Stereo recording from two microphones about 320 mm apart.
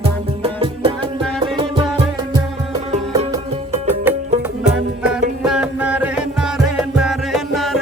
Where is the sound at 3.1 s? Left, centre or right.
Centre.